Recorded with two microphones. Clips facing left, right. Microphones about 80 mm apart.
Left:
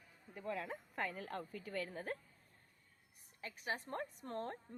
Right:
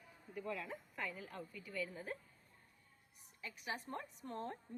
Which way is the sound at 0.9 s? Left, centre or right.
Left.